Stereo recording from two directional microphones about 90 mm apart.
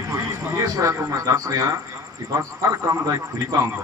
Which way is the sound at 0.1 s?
35° right (ahead or behind).